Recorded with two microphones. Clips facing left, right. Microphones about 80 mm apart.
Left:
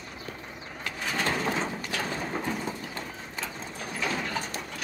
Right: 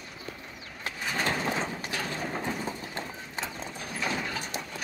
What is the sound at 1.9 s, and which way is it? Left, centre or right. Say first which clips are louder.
Mechanisms: left 1 dB; centre.